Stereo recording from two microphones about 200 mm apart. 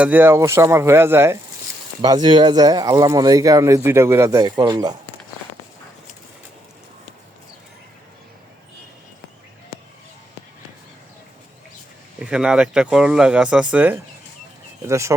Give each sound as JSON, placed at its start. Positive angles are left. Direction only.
{"t": 0.0, "sound": "speech", "side_deg": -10}
{"t": 12.2, "sound": "speech", "side_deg": -5}